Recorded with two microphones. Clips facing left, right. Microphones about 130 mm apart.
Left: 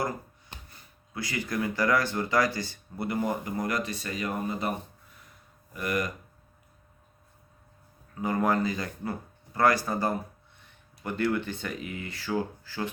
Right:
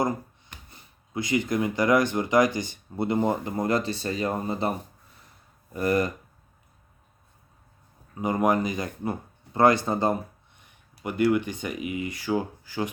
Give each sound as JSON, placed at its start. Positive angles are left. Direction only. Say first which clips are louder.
{"t": 0.7, "sound": "speech", "louder": "right 11 dB", "side_deg": -20}
{"t": 5.7, "sound": "speech", "louder": "right 6 dB", "side_deg": -30}
{"t": 8.1, "sound": "speech", "louder": "right 3 dB", "side_deg": -20}